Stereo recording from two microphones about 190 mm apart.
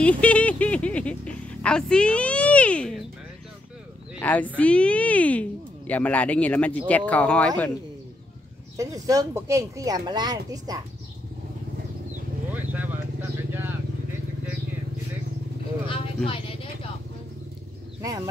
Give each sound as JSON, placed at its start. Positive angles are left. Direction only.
{"t": 0.0, "sound": "speech", "side_deg": 5}
{"t": 4.2, "sound": "speech", "side_deg": 10}
{"t": 8.7, "sound": "speech", "side_deg": -20}
{"t": 12.5, "sound": "vehicle", "side_deg": -10}
{"t": 18.0, "sound": "speech", "side_deg": -20}